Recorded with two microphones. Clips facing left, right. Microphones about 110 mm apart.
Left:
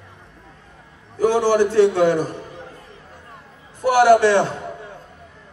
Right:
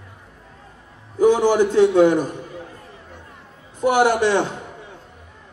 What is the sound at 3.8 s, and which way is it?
Speech, 20° right (ahead or behind).